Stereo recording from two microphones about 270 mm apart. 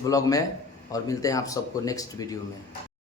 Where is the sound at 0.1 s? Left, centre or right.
Centre.